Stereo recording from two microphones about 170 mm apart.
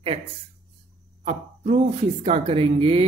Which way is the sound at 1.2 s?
35° right (ahead or behind).